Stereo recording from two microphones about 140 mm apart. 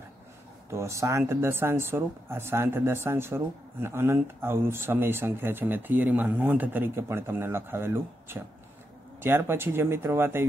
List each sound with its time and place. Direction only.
0.7 s speech: 20° right (ahead or behind)